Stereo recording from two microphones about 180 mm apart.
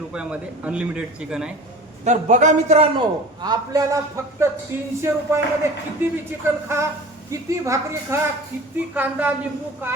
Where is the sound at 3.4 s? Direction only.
20° right (ahead or behind).